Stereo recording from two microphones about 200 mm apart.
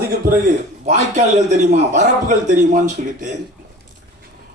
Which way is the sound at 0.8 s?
35° right (ahead or behind).